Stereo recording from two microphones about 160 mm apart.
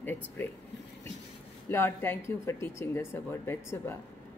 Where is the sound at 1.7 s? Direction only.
15° left (ahead or behind).